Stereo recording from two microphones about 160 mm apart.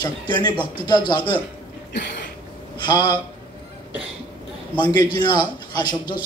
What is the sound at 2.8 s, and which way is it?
Speech, 25° left (ahead or behind).